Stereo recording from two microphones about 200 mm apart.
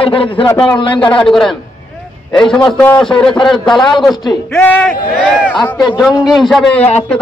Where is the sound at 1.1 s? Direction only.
Centre (ahead or behind).